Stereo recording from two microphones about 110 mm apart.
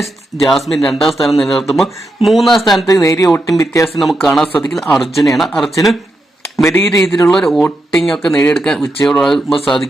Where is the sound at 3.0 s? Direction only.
30° left (ahead or behind).